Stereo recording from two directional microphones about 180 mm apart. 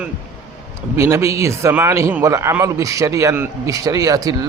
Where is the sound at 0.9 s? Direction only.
15° right (ahead or behind).